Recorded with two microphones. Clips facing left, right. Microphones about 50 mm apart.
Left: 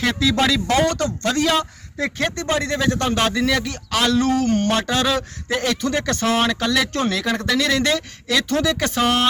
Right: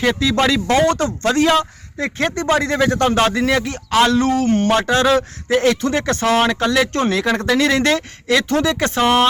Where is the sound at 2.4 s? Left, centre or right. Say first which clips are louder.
Right 5 dB; right.